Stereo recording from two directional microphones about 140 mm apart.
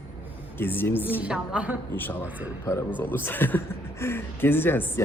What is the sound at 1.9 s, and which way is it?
Speech, 15° left (ahead or behind).